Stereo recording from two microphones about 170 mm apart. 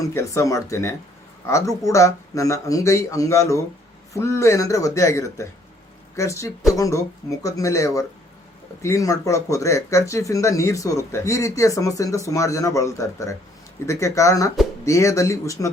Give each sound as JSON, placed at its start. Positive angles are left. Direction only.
{"t": 0.0, "sound": "speech", "side_deg": 20}